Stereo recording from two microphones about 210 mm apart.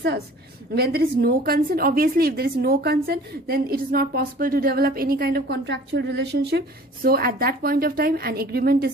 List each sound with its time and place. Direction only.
0.8 s a woman's voice: 45° right (ahead or behind)